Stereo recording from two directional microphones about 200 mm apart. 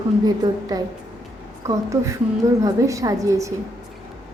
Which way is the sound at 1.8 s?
15° right (ahead or behind).